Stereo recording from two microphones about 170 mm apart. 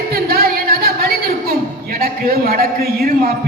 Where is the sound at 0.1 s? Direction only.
65° right (ahead or behind).